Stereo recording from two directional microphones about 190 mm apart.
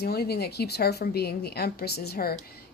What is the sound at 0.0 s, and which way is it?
A woman's voice, 55° left (ahead or behind).